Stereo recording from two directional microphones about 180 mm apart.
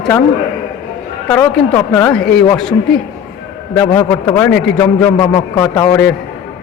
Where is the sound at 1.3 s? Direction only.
15° left (ahead or behind).